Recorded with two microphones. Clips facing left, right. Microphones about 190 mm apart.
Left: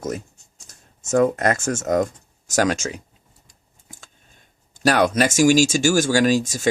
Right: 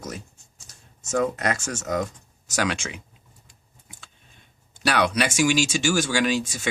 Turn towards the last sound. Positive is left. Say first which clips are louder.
# left 6 dB
turn(degrees=45)  # may be behind; listen again after turning